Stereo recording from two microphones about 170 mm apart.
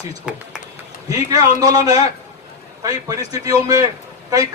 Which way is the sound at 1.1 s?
20° right (ahead or behind).